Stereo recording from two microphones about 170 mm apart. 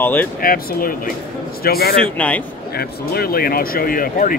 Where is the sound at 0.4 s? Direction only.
60° left (ahead or behind).